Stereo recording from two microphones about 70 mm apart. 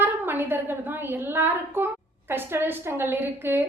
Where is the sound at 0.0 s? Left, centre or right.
Right.